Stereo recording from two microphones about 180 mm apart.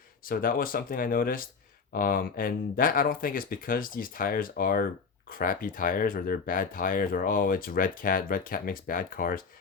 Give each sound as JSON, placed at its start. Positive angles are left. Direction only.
{"t": 0.3, "sound": "speech", "side_deg": 50}